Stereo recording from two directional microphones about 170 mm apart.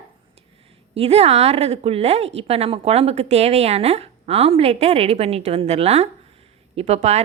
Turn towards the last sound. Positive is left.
turn(degrees=-40)  # may be behind; listen again after turning